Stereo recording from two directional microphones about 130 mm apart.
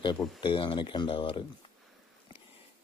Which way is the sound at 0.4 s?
40° left (ahead or behind).